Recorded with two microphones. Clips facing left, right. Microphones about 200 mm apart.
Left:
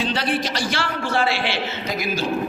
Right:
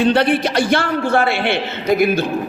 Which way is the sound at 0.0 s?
60° right (ahead or behind).